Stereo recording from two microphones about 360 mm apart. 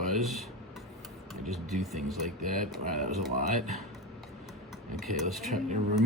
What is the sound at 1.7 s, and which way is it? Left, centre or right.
Speech, centre.